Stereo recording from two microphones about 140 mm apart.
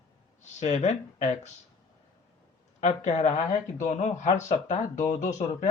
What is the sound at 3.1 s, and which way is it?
Speech, 55° left (ahead or behind).